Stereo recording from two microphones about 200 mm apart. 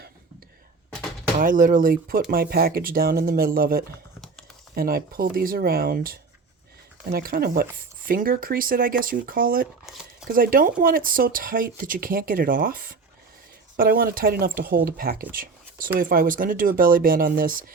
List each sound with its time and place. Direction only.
1.4 s speech: 40° right (ahead or behind)
9.8 s a sound: centre (ahead or behind)
10.2 s speech: 45° right (ahead or behind)